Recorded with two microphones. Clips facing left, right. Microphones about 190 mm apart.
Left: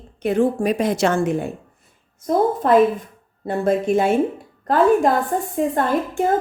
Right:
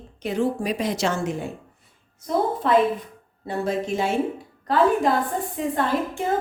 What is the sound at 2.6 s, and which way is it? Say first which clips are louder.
A woman's voice: left 5 dB; 45° left (ahead or behind).